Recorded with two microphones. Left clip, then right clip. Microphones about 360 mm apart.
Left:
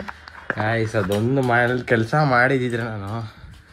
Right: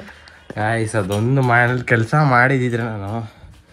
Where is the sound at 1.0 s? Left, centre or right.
Right.